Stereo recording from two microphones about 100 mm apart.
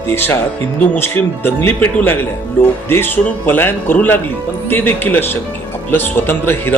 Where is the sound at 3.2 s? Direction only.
20° left (ahead or behind).